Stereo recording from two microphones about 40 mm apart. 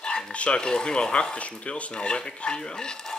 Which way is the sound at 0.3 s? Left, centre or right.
Left.